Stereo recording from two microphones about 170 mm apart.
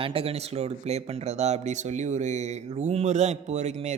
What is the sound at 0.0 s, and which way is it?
Speech, 35° right (ahead or behind).